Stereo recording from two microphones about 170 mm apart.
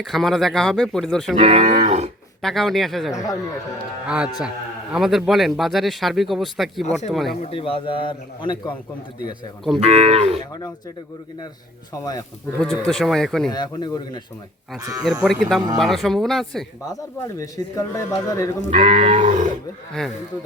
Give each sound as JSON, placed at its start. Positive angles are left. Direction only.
{"t": 0.0, "sound": "speech", "side_deg": 0}
{"t": 1.4, "sound": "speech", "side_deg": -35}
{"t": 2.4, "sound": "speech", "side_deg": 0}
{"t": 7.4, "sound": "a man's voice", "side_deg": 35}
{"t": 9.8, "sound": "speech", "side_deg": -40}
{"t": 12.0, "sound": "speech", "side_deg": 20}
{"t": 12.5, "sound": "speech", "side_deg": 5}
{"t": 13.5, "sound": "speech", "side_deg": 25}
{"t": 14.8, "sound": "speech", "side_deg": -20}
{"t": 15.0, "sound": "speech", "side_deg": 0}
{"t": 17.2, "sound": "speech", "side_deg": 20}
{"t": 18.7, "sound": "speech", "side_deg": -35}
{"t": 19.2, "sound": "speech", "side_deg": -50}
{"t": 19.9, "sound": "speech", "side_deg": 0}